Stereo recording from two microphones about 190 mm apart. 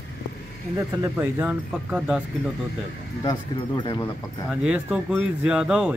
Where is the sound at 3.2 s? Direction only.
25° left (ahead or behind).